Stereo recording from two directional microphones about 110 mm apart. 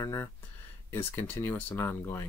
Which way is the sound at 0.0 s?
25° left (ahead or behind).